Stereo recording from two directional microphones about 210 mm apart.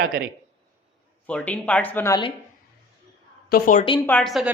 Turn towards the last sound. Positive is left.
turn(degrees=0)  # may be behind; listen again after turning